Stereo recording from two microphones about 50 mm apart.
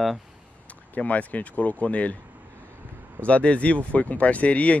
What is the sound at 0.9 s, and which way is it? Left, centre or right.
Speech, left.